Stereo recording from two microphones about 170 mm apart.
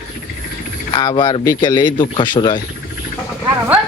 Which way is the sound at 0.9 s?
25° left (ahead or behind).